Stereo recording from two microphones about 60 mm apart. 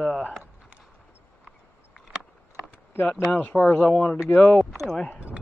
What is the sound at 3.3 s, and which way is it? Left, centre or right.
Speech, left.